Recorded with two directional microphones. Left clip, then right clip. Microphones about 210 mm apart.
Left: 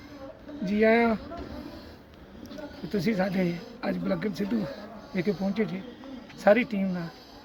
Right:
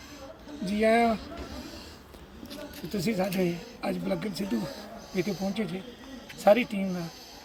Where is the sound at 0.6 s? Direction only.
5° left (ahead or behind).